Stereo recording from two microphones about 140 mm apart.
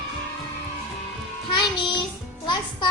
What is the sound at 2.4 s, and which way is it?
Speech, 35° left (ahead or behind).